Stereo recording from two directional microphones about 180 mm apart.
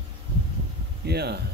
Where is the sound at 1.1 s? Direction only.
65° right (ahead or behind).